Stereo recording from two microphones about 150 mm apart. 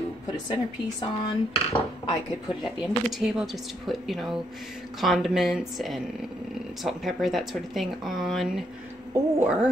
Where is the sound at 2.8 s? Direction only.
5° right (ahead or behind).